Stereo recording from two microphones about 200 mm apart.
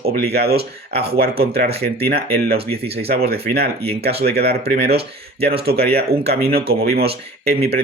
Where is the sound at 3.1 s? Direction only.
50° right (ahead or behind).